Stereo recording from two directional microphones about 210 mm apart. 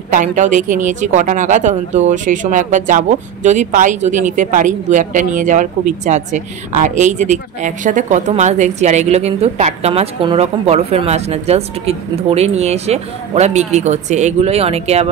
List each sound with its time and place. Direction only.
0.1 s a woman's voice: 40° right (ahead or behind)